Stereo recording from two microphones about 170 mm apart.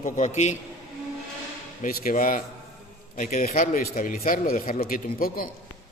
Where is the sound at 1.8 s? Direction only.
55° left (ahead or behind).